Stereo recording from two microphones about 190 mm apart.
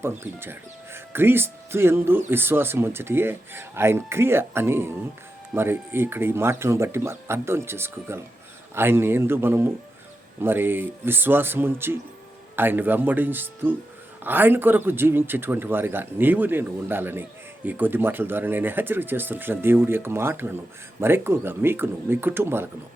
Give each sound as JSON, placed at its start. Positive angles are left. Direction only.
{"t": 0.0, "sound": "speech", "side_deg": -10}